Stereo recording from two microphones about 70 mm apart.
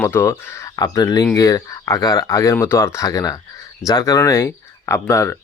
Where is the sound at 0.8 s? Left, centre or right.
Left.